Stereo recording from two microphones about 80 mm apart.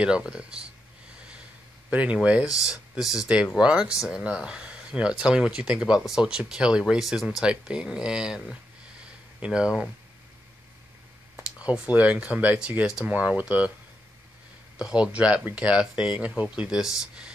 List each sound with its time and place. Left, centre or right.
0.0 s speech: centre
1.9 s speech: centre
11.7 s speech: centre
14.8 s speech: centre